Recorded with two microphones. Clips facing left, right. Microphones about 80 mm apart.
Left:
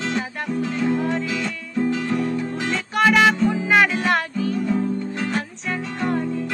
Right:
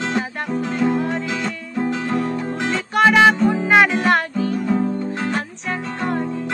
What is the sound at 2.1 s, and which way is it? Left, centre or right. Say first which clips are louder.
Music: right 1 dB; right.